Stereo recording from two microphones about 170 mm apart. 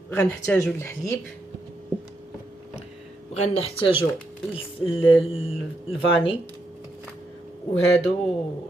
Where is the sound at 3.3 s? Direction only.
40° left (ahead or behind).